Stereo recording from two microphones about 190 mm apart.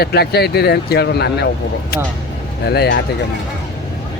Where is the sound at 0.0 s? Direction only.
55° left (ahead or behind).